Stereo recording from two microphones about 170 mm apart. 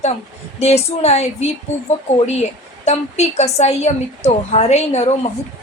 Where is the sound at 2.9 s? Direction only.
40° left (ahead or behind).